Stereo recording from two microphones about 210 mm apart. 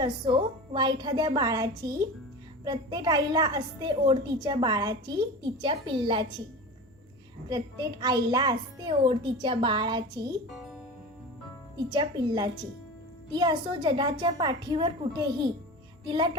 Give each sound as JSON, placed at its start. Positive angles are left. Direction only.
{"t": 0.7, "sound": "a woman's voice", "side_deg": -20}
{"t": 7.5, "sound": "a woman's voice", "side_deg": -20}
{"t": 10.5, "sound": "music", "side_deg": 0}
{"t": 11.9, "sound": "a woman's voice", "side_deg": -20}